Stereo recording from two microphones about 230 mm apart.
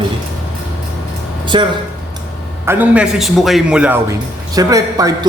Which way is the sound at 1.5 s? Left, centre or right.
Centre.